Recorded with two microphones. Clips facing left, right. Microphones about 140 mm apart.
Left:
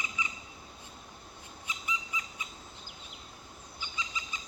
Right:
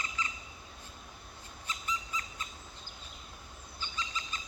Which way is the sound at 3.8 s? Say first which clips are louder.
Right 1 dB; 15° left (ahead or behind).